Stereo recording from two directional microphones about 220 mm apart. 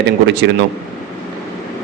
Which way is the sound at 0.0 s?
50° right (ahead or behind).